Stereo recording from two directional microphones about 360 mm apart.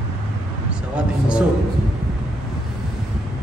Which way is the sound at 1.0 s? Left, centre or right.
Centre.